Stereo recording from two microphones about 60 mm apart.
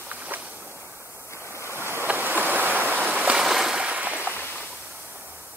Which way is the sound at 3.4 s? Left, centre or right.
Centre.